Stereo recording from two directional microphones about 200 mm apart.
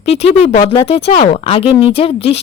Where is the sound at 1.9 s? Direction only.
30° left (ahead or behind).